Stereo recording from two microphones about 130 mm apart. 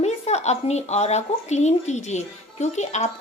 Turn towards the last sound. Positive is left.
turn(degrees=60)  # may be behind; listen again after turning